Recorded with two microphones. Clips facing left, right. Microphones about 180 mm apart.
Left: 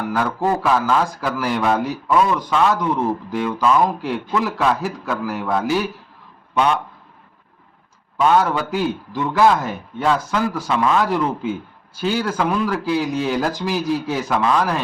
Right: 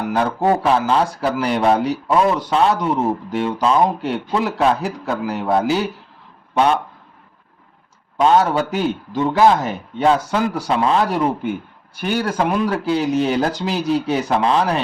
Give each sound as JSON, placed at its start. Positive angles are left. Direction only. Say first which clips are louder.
{"t": 0.0, "sound": "speech", "louder": "right 2 dB", "side_deg": -20}
{"t": 6.5, "sound": "speech", "louder": "right 2 dB", "side_deg": -35}
{"t": 8.2, "sound": "speech", "louder": "right 2 dB", "side_deg": -25}
{"t": 11.4, "sound": "speech", "louder": "right 1 dB", "side_deg": -65}
{"t": 12.3, "sound": "speech", "louder": "right 1 dB", "side_deg": -20}